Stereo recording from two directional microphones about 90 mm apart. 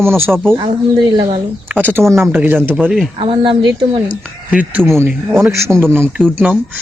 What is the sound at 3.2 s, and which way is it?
Speech, 70° right (ahead or behind).